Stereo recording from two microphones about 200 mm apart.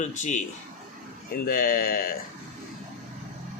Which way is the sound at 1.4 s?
45° left (ahead or behind).